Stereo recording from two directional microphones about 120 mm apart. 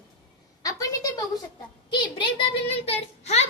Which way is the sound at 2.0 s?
45° left (ahead or behind).